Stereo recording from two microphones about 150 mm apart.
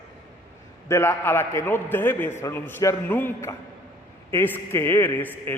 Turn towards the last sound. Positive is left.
turn(degrees=10)  # may be behind; listen again after turning